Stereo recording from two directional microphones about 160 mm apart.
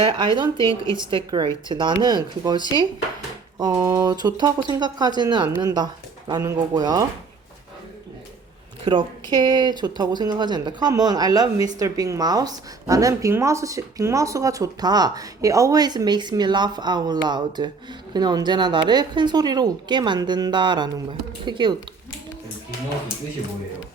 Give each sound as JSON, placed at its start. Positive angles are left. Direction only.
{"t": 0.0, "sound": "a woman's voice", "side_deg": -30}
{"t": 8.8, "sound": "a woman's voice", "side_deg": -30}